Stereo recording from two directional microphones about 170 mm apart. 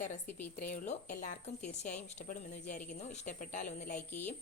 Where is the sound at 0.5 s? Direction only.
50° left (ahead or behind).